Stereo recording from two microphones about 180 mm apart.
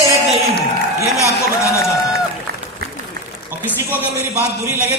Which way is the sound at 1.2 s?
15° left (ahead or behind).